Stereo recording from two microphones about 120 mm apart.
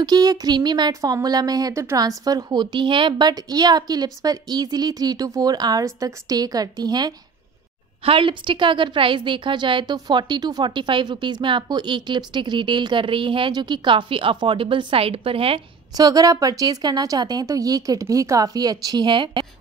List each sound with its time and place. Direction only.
0.0 s speech: 35° right (ahead or behind)
8.0 s a woman's voice: 50° right (ahead or behind)
16.0 s speech: 30° right (ahead or behind)